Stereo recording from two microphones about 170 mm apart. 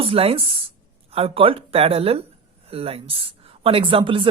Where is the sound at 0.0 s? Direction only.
35° right (ahead or behind).